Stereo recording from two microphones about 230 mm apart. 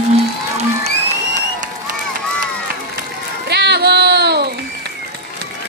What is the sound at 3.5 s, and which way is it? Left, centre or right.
Child singing, right.